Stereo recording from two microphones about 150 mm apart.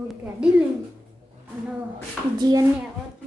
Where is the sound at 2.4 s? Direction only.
25° right (ahead or behind).